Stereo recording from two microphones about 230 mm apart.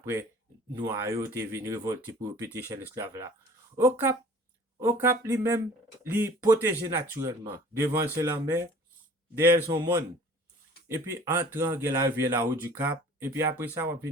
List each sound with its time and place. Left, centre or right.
0.0 s speech: centre